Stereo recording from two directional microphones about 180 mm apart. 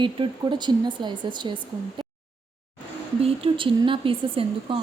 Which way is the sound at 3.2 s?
30° right (ahead or behind).